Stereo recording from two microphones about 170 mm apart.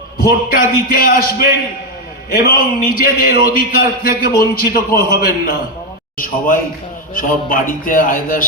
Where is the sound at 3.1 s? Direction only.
60° left (ahead or behind).